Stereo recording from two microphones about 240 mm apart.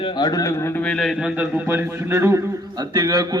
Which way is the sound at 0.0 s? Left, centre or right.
Centre.